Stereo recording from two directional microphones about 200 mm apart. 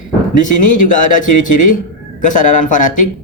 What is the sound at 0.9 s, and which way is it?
A man's voice, 40° left (ahead or behind).